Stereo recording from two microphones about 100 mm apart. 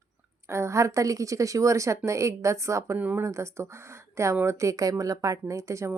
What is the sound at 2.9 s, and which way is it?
Speech, 15° right (ahead or behind).